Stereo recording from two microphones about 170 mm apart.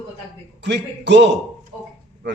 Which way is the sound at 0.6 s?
90° right.